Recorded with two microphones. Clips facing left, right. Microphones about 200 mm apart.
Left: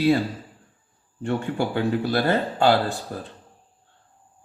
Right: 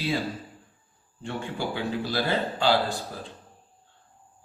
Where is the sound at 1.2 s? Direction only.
60° left (ahead or behind).